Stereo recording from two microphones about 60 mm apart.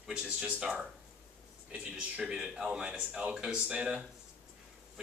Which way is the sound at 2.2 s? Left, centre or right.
Centre.